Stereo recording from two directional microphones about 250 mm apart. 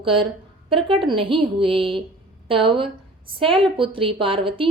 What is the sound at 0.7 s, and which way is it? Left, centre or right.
A woman's voice, right.